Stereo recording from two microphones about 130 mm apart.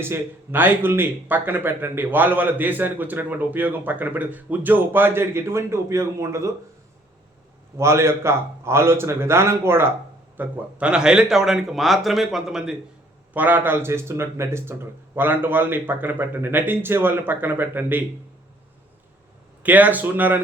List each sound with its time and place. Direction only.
0.0 s speech: 15° right (ahead or behind)
7.8 s a man's voice: 20° right (ahead or behind); by 12.7 s 5° right (ahead or behind)
13.3 s speech: 15° right (ahead or behind)
19.6 s speech: 10° right (ahead or behind)